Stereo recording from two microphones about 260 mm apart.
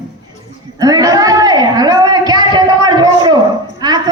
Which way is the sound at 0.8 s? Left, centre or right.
Centre.